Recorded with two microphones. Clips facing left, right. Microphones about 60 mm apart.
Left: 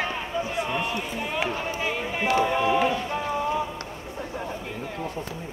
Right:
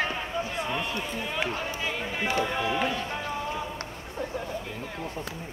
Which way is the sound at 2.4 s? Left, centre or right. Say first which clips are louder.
Left 6 dB; left.